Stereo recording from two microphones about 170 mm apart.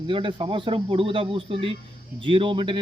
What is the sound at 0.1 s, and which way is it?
Speech, 30° right (ahead or behind).